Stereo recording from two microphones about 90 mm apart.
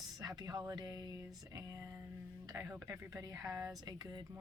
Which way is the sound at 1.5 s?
40° right (ahead or behind).